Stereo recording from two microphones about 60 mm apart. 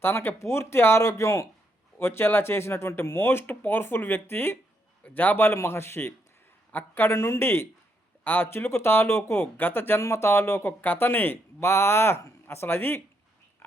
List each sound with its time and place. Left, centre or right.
0.0 s a man's voice: left
1.0 s speech: left
2.0 s a man's voice: left
6.7 s a man's voice: left
8.2 s a man's voice: left
8.4 s a man's voice: left
9.6 s a man's voice: left
10.7 s speech: left
13.6 s a sound: left